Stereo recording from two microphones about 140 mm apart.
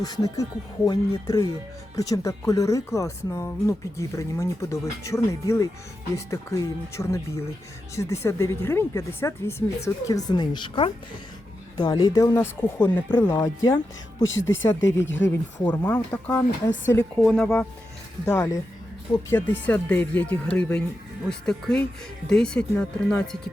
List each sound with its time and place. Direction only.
0.0 s speech: 25° left (ahead or behind); by 17.7 s 5° left (ahead or behind)
18.3 s speech: 25° left (ahead or behind); by 23.4 s 5° left (ahead or behind)